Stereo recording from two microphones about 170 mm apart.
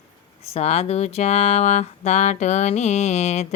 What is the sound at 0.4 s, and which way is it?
Speech, 40° left (ahead or behind).